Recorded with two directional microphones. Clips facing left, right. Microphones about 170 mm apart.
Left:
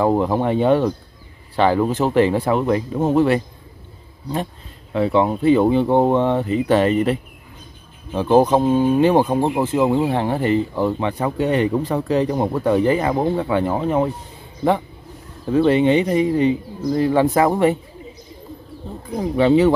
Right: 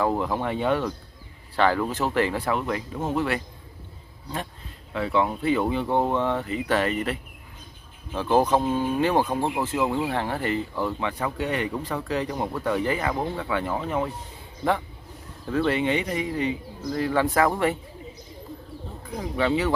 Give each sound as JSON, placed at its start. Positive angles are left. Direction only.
{"t": 0.0, "sound": "speech", "side_deg": 30}
{"t": 4.9, "sound": "speech", "side_deg": 30}
{"t": 15.4, "sound": "speech", "side_deg": 20}
{"t": 19.1, "sound": "speech", "side_deg": 25}